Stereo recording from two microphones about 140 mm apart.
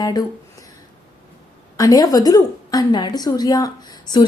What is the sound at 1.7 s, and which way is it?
A woman's voice, 25° left (ahead or behind).